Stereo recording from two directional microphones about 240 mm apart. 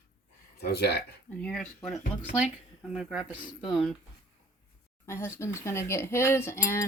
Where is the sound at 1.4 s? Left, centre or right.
Centre.